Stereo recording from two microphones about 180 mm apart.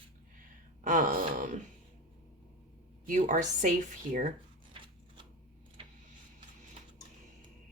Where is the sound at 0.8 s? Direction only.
45° right (ahead or behind).